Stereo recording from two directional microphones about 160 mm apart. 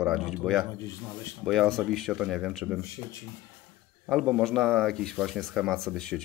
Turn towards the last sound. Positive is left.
turn(degrees=5)  # may be behind; listen again after turning